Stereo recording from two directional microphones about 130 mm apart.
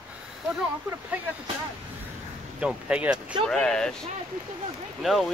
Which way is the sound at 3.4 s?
5° left (ahead or behind).